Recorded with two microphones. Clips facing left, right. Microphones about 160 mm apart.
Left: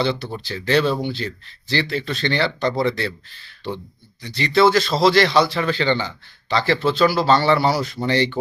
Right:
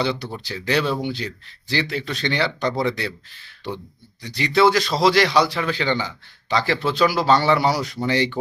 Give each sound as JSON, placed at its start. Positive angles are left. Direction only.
{"t": 0.0, "sound": "a man's voice", "side_deg": -10}
{"t": 4.2, "sound": "a man's voice", "side_deg": -10}